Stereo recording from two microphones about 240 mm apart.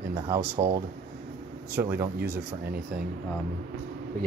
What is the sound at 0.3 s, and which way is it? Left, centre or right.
Speech, centre.